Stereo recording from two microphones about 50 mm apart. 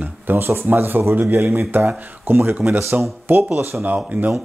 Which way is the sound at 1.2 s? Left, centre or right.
Right.